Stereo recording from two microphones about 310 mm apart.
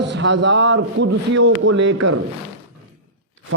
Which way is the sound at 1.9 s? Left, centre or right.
Right.